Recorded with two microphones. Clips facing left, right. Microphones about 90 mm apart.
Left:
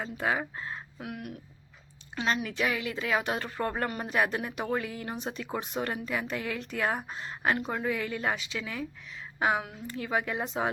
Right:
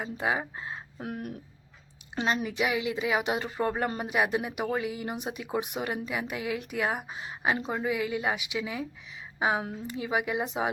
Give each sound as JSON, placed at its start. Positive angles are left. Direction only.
{"t": 0.0, "sound": "speech", "side_deg": -15}
{"t": 0.9, "sound": "a sound", "side_deg": -35}
{"t": 2.1, "sound": "speech", "side_deg": -20}